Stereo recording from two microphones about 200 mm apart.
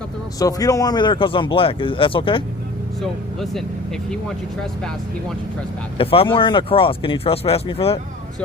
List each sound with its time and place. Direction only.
0.3 s speech: 15° left (ahead or behind)
3.0 s speech: centre (ahead or behind)
6.0 s speech: 25° left (ahead or behind)